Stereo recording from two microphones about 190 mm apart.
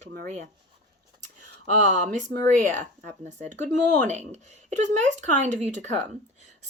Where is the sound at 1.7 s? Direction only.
40° right (ahead or behind).